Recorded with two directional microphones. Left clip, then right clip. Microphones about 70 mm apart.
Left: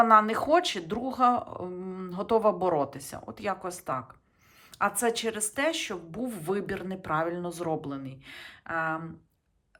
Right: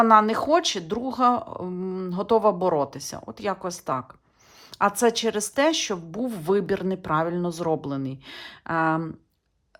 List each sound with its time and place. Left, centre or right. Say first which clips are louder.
0.0 s speech: right 3 dB; right
1.8 s speech: right 6 dB; right